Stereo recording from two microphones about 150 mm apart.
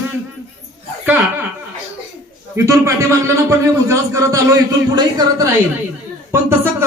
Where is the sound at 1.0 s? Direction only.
10° right (ahead or behind).